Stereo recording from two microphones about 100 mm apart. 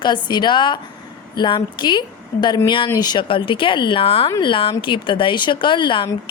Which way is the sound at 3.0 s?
50° left (ahead or behind).